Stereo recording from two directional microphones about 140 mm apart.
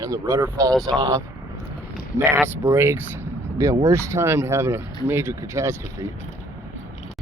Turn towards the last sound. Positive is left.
turn(degrees=-20)  # may be behind; listen again after turning